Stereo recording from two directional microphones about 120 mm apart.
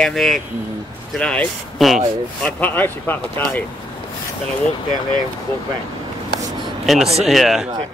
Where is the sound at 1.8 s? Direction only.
Centre (ahead or behind).